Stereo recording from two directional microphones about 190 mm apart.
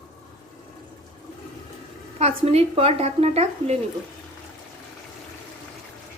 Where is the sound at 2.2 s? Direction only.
35° right (ahead or behind).